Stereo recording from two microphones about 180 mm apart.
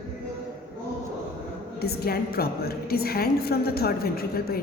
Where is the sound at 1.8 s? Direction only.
60° left (ahead or behind).